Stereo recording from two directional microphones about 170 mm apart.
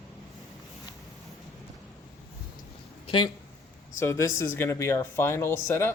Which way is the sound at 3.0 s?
30° left (ahead or behind).